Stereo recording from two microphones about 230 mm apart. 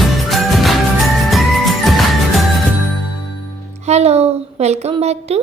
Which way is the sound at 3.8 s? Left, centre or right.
Right.